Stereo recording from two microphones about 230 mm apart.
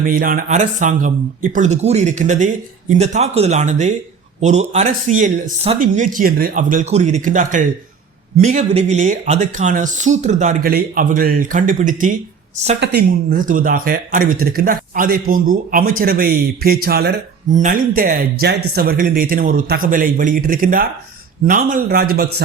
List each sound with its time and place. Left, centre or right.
0.0 s speech: right